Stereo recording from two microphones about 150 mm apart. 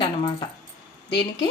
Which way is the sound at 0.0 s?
35° left (ahead or behind).